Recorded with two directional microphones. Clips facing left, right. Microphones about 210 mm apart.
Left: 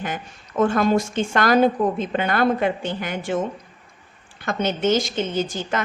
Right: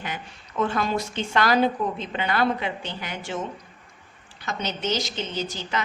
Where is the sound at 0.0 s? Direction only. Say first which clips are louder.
Left 5 dB; 50° left (ahead or behind).